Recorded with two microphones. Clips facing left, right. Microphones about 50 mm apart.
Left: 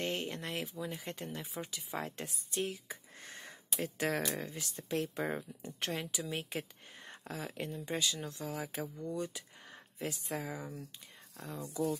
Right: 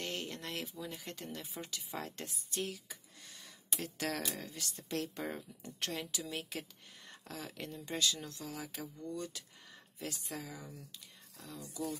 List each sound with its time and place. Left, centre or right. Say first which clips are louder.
0.0 s a sound: left 4 dB; left
0.4 s speech: left 3 dB; centre; by 3.5 s left
3.7 s speech: left 4 dB; centre
5.2 s speech: left 5 dB; left
9.0 s speech: left 2 dB; centre
9.7 s speech: left 4 dB; left